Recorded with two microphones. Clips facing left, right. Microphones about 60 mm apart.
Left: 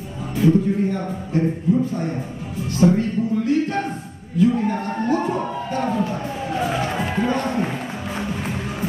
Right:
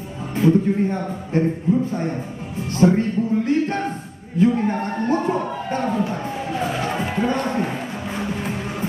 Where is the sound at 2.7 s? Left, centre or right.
Right.